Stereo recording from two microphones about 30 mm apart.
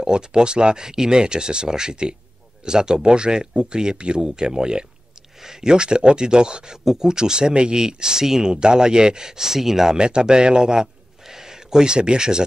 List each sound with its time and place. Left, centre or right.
0.0 s speech: right
8.5 s speech: right; by 9.9 s centre
9.9 s speech: right